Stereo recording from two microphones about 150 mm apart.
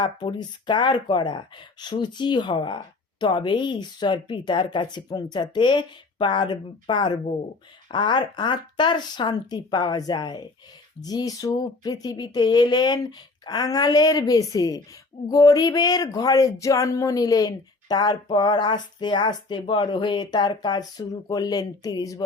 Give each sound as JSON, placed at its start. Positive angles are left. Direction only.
{"t": 0.0, "sound": "speech", "side_deg": 30}